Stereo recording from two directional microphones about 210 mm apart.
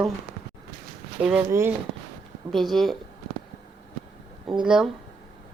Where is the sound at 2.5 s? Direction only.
Centre (ahead or behind).